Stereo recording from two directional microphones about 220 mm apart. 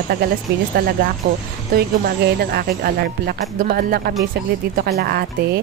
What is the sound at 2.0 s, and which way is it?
Speech, 45° right (ahead or behind).